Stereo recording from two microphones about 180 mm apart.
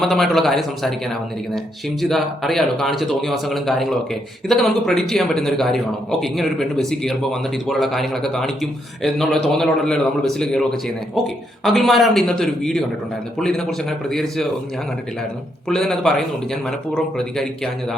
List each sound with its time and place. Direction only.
0.0 s speech: centre (ahead or behind)
15.7 s speech: 5° left (ahead or behind)